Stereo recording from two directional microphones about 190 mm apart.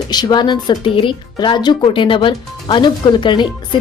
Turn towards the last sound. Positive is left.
turn(degrees=25)  # may be behind; listen again after turning